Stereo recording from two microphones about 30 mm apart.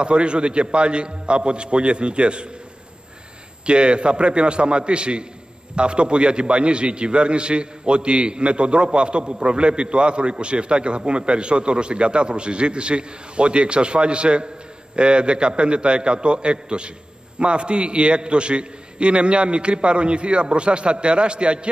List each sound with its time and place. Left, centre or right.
0.0 s a man's voice: right
3.6 s a man's voice: right